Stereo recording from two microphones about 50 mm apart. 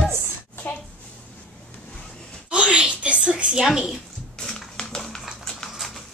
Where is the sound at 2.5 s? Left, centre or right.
Right.